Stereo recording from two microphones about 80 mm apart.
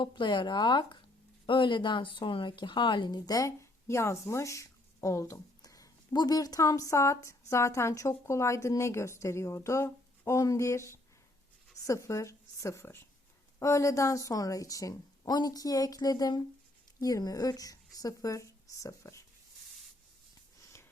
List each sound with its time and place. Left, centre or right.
0.0 s speech: left
1.5 s speech: left
3.2 s a woman's voice: left
13.6 s a woman's voice: left
20.6 s a sound: left